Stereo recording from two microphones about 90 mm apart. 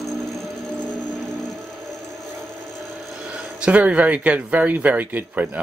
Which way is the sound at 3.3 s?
10° right (ahead or behind).